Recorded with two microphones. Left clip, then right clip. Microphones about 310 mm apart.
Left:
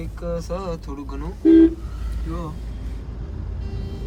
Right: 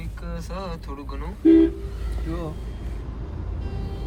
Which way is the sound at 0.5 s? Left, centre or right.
Centre.